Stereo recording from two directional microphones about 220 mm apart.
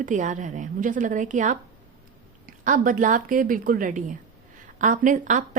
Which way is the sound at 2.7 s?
35° right (ahead or behind).